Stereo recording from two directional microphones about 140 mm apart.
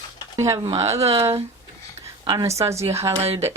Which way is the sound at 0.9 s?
50° right (ahead or behind).